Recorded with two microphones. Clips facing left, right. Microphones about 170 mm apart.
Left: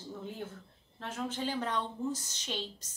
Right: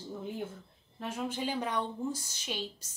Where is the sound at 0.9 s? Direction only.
10° right (ahead or behind).